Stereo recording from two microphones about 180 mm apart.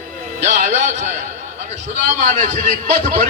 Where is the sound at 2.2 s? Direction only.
40° right (ahead or behind).